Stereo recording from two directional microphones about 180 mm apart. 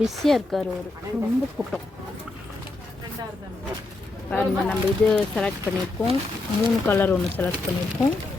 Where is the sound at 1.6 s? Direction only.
15° right (ahead or behind).